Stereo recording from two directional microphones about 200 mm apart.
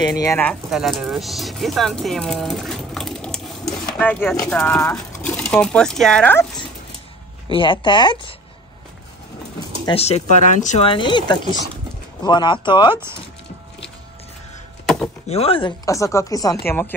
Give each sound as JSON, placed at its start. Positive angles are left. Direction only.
{"t": 0.1, "sound": "speech", "side_deg": 15}
{"t": 0.7, "sound": "speech", "side_deg": 0}
{"t": 7.5, "sound": "speech", "side_deg": 25}
{"t": 9.8, "sound": "speech", "side_deg": 30}
{"t": 15.2, "sound": "speech", "side_deg": 30}